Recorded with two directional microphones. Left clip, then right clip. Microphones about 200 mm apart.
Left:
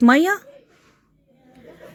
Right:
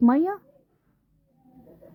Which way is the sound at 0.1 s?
15° left (ahead or behind).